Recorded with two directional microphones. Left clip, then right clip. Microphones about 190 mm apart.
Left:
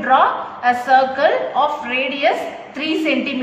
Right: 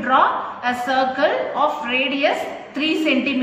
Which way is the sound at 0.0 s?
25° left (ahead or behind).